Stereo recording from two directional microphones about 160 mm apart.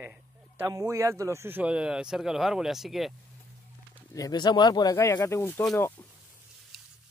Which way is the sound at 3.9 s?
20° left (ahead or behind).